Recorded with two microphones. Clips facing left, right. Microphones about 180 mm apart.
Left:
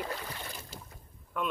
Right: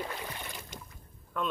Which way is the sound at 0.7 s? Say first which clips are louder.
Right 1 dB; 35° left (ahead or behind).